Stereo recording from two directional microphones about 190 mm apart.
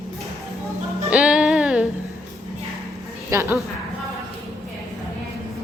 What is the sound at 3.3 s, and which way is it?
Speech, 15° right (ahead or behind).